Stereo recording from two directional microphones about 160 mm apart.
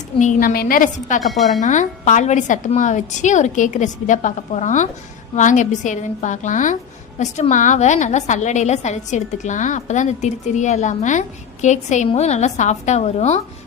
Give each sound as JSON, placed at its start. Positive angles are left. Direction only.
{"t": 0.2, "sound": "a woman's voice", "side_deg": 55}
{"t": 1.3, "sound": "speech", "side_deg": 0}
{"t": 1.6, "sound": "a woman's voice", "side_deg": 50}